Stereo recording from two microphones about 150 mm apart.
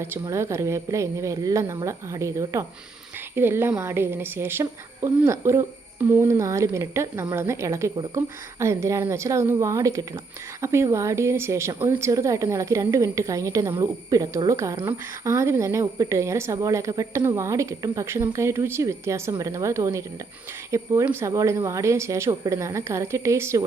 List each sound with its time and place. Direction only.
0.0 s a woman's voice: 15° right (ahead or behind)